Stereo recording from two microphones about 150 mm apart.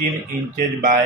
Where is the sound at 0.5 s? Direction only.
70° right (ahead or behind).